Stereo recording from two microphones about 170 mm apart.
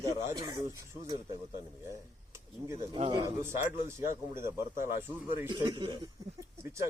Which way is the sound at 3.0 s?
30° right (ahead or behind).